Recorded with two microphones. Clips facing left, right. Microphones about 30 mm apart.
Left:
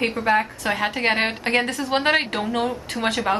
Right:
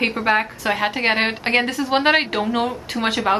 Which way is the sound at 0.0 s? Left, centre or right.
Right.